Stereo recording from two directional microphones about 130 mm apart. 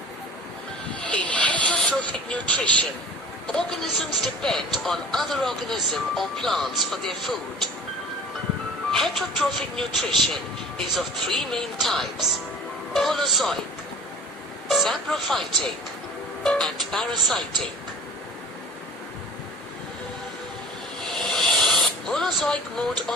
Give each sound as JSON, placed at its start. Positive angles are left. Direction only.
{"t": 0.9, "sound": "vehicle", "side_deg": 10}
{"t": 3.5, "sound": "speech", "side_deg": 0}
{"t": 8.9, "sound": "speech", "side_deg": 0}
{"t": 12.9, "sound": "music", "side_deg": 0}
{"t": 14.7, "sound": "speech", "side_deg": 0}
{"t": 21.0, "sound": "snake", "side_deg": 0}